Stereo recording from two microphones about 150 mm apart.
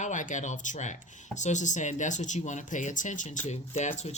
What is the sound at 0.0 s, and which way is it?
Speech, 55° left (ahead or behind).